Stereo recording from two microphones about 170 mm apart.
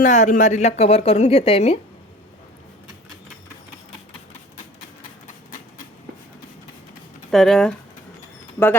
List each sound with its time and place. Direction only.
0.0 s a woman's voice: 45° left (ahead or behind)
7.3 s speech: centre (ahead or behind)